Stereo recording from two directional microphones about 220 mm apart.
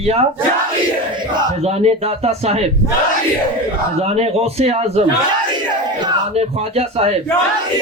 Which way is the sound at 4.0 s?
30° right (ahead or behind).